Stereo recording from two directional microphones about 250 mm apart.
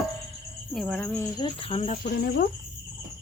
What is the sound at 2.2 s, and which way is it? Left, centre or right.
Speech, left.